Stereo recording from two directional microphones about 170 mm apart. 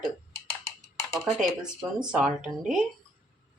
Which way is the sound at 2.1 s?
Centre (ahead or behind).